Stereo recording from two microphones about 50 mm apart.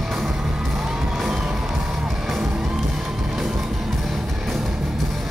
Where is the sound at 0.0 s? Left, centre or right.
Centre.